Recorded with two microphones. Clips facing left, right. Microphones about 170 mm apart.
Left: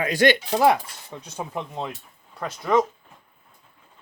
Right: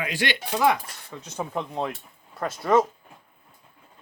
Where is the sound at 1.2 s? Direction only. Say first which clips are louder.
Right 2 dB; 10° left (ahead or behind).